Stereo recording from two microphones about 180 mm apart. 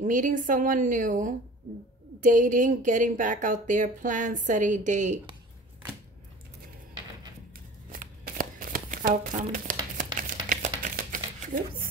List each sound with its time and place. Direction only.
0.0 s a woman's voice: 45° right (ahead or behind)
7.9 s shuffling cards: 50° right (ahead or behind)